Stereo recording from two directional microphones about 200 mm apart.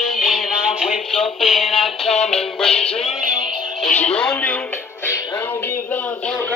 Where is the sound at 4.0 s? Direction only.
5° left (ahead or behind).